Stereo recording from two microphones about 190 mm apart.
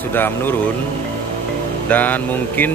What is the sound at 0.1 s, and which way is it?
Speech, 10° left (ahead or behind).